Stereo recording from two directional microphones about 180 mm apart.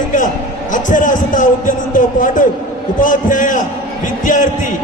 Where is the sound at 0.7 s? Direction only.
45° left (ahead or behind).